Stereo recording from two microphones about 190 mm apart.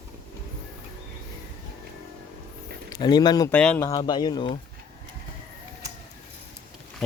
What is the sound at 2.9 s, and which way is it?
Speech, 20° left (ahead or behind).